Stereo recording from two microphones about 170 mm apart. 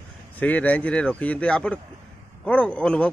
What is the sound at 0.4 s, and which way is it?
Speech, 10° left (ahead or behind).